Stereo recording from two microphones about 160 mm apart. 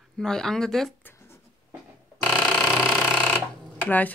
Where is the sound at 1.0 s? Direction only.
15° left (ahead or behind).